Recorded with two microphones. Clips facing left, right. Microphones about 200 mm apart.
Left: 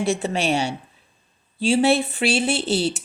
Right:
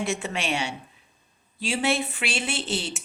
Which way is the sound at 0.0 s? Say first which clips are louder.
Left 6 dB; 35° left (ahead or behind).